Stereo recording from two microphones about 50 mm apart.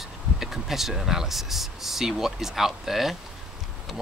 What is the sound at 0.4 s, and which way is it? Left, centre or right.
Speech, centre.